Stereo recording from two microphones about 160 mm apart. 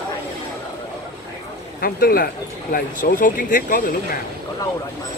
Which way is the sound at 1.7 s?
65° left (ahead or behind).